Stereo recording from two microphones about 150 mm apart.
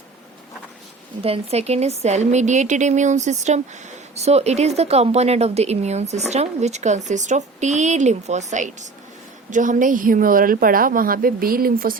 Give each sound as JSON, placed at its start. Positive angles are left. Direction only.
{"t": 1.2, "sound": "a woman's voice", "side_deg": -40}